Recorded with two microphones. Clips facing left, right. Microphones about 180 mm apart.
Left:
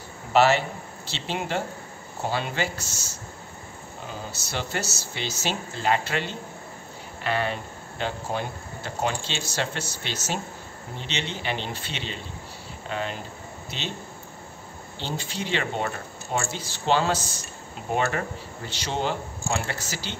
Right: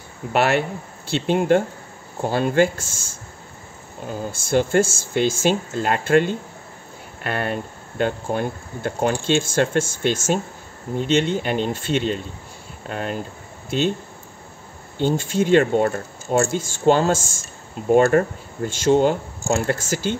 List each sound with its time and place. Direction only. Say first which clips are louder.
0.3 s speech: right 1 dB; 55° right (ahead or behind)
4.3 s speech: right 14 dB; 50° right (ahead or behind)
15.0 s speech: right 12 dB; 50° right (ahead or behind)